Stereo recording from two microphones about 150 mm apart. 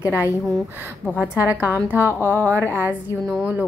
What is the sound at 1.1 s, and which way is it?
A woman's voice, 10° right (ahead or behind).